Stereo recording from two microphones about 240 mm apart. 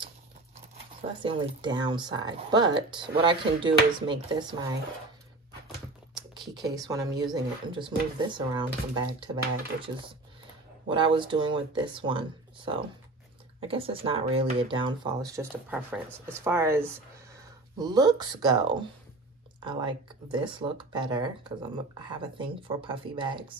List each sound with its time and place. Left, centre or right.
1.2 s speech: centre
6.3 s speech: centre
10.9 s speech: centre